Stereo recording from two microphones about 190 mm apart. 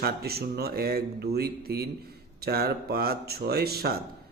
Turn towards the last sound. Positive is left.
turn(degrees=-55)  # may be behind; listen again after turning